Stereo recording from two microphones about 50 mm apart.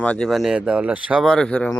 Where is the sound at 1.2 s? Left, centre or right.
Centre.